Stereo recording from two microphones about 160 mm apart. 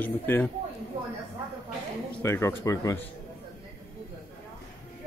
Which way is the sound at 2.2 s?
15° left (ahead or behind).